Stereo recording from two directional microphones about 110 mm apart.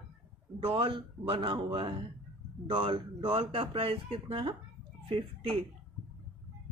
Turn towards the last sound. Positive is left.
turn(degrees=-55)  # may be behind; listen again after turning